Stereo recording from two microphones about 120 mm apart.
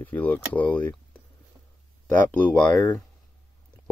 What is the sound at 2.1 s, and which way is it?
Speech, 10° left (ahead or behind).